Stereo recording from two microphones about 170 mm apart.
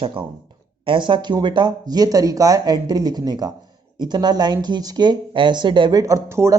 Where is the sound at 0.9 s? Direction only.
30° right (ahead or behind).